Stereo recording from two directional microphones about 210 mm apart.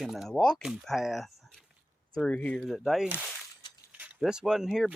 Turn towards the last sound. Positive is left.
turn(degrees=0)  # may be behind; listen again after turning